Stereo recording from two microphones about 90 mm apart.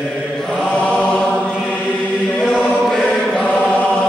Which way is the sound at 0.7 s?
15° left (ahead or behind).